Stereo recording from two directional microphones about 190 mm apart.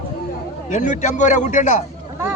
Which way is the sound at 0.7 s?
40° left (ahead or behind).